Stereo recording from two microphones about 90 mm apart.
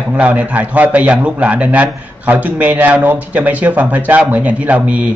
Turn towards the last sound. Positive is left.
turn(degrees=-15)  # may be behind; listen again after turning